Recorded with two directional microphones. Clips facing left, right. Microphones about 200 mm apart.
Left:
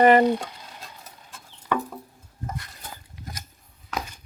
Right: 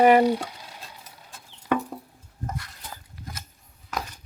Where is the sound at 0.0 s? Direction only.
5° right (ahead or behind).